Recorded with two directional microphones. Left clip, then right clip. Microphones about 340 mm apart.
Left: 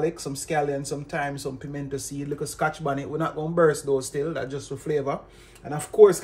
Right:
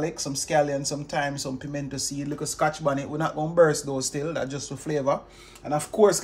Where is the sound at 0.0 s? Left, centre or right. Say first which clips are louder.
Left 2 dB; right.